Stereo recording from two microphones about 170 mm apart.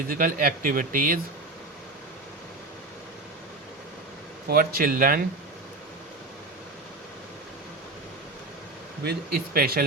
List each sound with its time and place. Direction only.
0.1 s speech: 55° right (ahead or behind)
4.4 s speech: 60° right (ahead or behind)
9.0 s speech: 60° right (ahead or behind)